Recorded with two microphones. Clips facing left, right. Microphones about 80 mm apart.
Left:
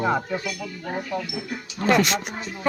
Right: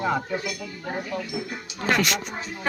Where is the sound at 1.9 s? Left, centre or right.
Left.